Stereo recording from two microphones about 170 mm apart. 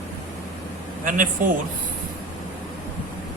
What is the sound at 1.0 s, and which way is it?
Speech, 50° right (ahead or behind).